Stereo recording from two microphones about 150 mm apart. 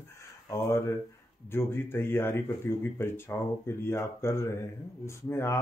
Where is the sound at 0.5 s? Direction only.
15° left (ahead or behind).